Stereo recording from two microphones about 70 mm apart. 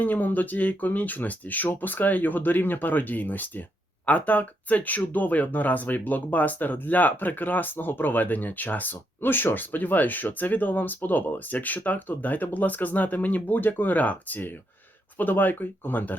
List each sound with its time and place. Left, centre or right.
0.0 s speech: left